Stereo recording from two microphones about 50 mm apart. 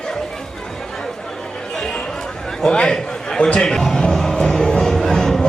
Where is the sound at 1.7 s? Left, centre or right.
Centre.